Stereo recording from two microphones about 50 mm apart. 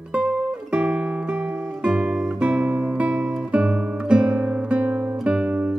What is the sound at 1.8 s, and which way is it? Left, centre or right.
Guitar, right.